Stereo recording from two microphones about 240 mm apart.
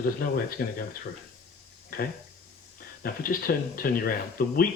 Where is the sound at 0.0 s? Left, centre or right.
Left.